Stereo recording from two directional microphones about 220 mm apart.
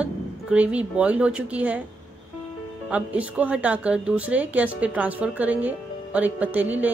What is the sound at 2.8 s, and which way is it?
Speech, 5° right (ahead or behind).